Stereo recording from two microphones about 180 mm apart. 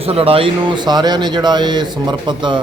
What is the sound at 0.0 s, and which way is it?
A man's voice, 30° right (ahead or behind).